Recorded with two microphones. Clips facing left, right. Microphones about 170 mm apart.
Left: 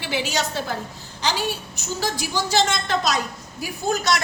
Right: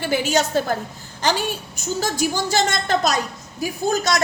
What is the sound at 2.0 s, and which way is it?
A woman's voice, 45° right (ahead or behind).